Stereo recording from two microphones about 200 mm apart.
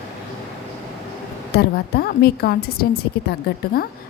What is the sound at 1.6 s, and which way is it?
A woman's voice, 50° left (ahead or behind).